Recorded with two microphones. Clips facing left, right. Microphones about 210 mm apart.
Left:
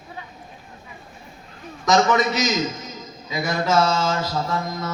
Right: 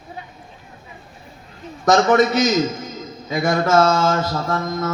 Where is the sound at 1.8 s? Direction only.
50° right (ahead or behind).